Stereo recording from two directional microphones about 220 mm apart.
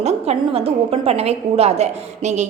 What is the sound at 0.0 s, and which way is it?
A woman's voice, 30° right (ahead or behind).